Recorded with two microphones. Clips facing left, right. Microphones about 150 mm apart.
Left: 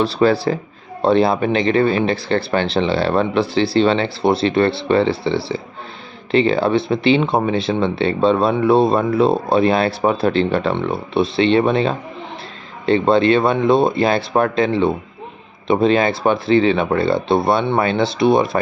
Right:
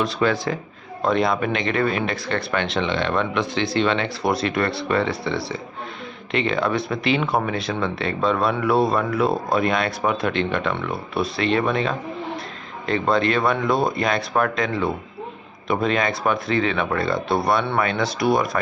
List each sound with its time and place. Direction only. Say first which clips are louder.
0.0 s speech: left 6 dB; 35° left (ahead or behind)